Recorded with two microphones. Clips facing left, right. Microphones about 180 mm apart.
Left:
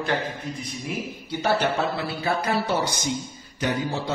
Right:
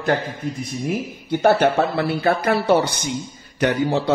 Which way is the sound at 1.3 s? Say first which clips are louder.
Right 7 dB; 50° right (ahead or behind).